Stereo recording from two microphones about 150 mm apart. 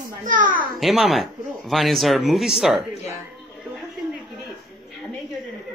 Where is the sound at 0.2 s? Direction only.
60° right (ahead or behind).